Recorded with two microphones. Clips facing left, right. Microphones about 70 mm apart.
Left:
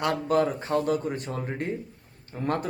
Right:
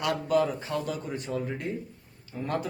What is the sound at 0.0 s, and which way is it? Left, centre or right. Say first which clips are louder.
Speech: left 2 dB; left.